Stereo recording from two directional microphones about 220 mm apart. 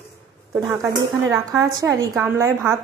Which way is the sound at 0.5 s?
10° right (ahead or behind).